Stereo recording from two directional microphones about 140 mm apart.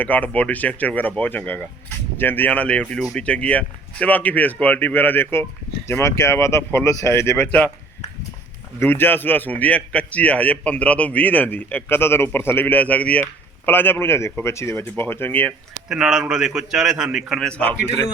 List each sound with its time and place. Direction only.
0.0 s a man's voice: 10° left (ahead or behind)
8.8 s a man's voice: 15° left (ahead or behind)
15.9 s a man's voice: 5° right (ahead or behind)